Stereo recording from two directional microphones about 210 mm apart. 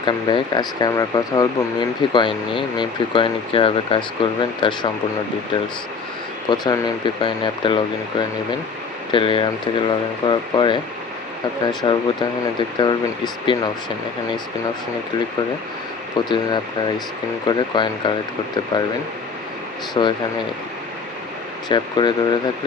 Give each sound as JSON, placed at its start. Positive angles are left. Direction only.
{"t": 0.0, "sound": "speech", "side_deg": 20}
{"t": 6.5, "sound": "speech", "side_deg": 20}
{"t": 11.8, "sound": "speech", "side_deg": 20}
{"t": 16.1, "sound": "speech", "side_deg": 20}
{"t": 19.9, "sound": "speech", "side_deg": 20}
{"t": 21.7, "sound": "speech", "side_deg": 20}